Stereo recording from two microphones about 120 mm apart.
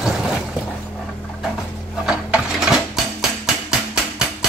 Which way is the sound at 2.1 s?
5° right (ahead or behind).